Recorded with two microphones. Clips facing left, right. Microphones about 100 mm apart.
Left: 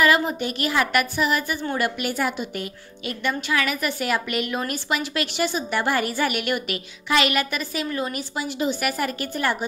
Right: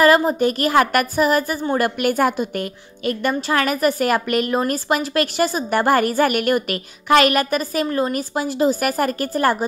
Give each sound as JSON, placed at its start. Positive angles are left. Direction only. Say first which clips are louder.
{"t": 0.0, "sound": "a woman's voice", "louder": "right 6 dB", "side_deg": -40}